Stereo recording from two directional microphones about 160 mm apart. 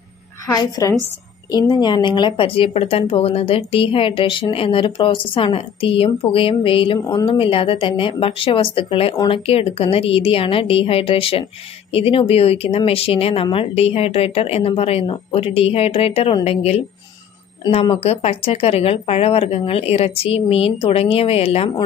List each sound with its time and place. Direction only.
0.5 s a woman's voice: 25° left (ahead or behind)
9.1 s a woman's voice: 25° left (ahead or behind)
9.5 s speech: 35° left (ahead or behind)